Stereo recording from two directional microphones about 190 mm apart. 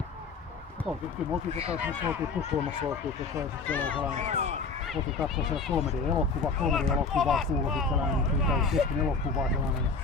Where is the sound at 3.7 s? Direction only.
5° left (ahead or behind).